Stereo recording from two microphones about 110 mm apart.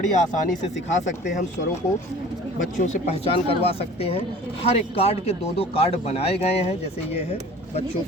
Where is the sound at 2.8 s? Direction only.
90° left.